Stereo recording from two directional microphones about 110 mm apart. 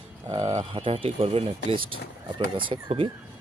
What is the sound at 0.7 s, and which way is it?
Speech, 55° right (ahead or behind).